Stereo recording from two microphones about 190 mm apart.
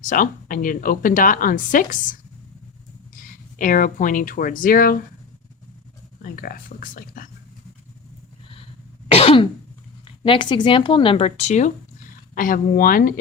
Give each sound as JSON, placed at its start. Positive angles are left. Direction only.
{"t": 0.0, "sound": "a woman's voice", "side_deg": 45}
{"t": 3.6, "sound": "a woman's voice", "side_deg": 45}
{"t": 6.2, "sound": "a woman's voice", "side_deg": 50}
{"t": 9.1, "sound": "throat clearing", "side_deg": 30}
{"t": 10.2, "sound": "a woman's voice", "side_deg": 25}